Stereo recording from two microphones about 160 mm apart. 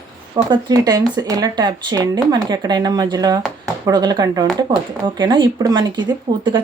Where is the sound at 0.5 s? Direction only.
25° right (ahead or behind).